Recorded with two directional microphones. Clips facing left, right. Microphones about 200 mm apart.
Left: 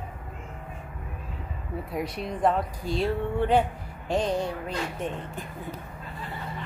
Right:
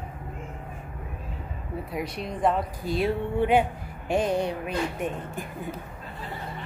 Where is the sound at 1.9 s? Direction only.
Centre (ahead or behind).